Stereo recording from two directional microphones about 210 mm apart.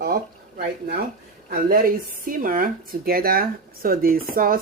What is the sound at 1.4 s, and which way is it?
Speech, 45° right (ahead or behind).